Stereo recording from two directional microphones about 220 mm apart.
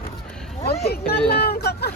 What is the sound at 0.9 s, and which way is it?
Speech, 45° left (ahead or behind).